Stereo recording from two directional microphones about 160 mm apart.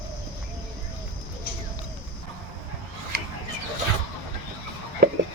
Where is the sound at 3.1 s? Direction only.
70° right (ahead or behind).